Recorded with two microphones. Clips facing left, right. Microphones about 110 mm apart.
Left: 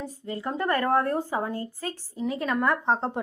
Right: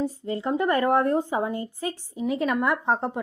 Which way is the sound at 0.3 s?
30° right (ahead or behind).